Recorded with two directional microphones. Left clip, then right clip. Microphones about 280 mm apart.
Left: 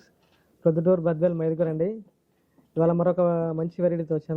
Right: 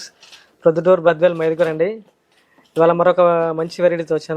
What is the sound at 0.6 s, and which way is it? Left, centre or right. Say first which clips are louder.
Speech: right 9 dB; centre.